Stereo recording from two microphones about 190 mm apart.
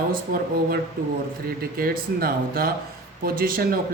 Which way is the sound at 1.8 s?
50° right (ahead or behind).